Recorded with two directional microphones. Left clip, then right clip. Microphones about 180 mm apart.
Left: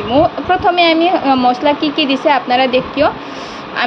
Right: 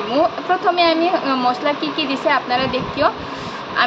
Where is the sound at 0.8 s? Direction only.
20° left (ahead or behind).